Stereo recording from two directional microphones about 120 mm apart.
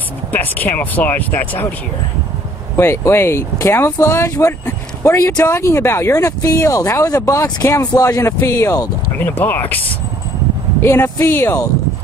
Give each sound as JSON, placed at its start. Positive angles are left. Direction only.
{"t": 0.3, "sound": "speech", "side_deg": 15}
{"t": 2.8, "sound": "speech", "side_deg": 20}